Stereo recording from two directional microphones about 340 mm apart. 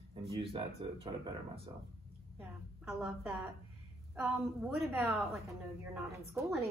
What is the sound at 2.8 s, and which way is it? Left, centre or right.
Speech, centre.